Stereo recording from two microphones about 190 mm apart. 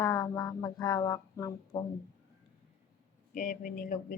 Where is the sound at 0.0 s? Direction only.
20° left (ahead or behind).